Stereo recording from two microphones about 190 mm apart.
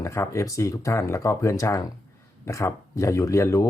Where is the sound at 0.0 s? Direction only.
15° left (ahead or behind).